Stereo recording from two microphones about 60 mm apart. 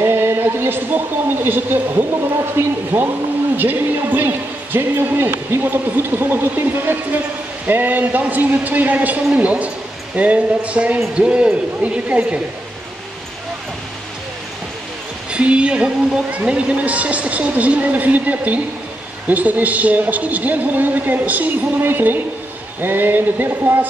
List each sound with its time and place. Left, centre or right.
0.0 s a man's voice: right
3.5 s speech: right
15.3 s speech: centre